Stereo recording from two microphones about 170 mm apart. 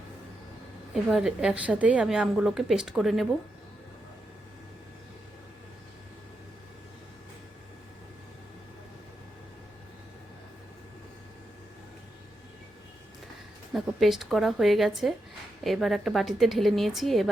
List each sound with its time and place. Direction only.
0.9 s a woman's voice: 5° right (ahead or behind)
13.7 s a woman's voice: centre (ahead or behind)